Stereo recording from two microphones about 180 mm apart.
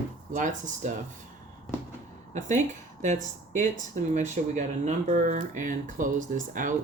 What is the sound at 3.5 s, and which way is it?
Speech, 45° right (ahead or behind).